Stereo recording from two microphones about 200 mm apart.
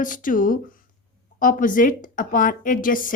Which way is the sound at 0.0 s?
40° left (ahead or behind).